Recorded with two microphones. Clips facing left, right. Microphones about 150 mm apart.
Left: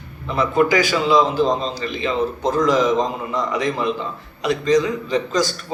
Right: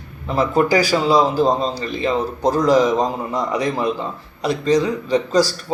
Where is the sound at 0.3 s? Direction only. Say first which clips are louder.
Right 1 dB; 35° right (ahead or behind).